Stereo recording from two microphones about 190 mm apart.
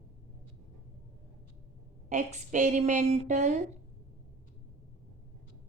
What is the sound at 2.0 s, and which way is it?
A woman's voice, 40° right (ahead or behind).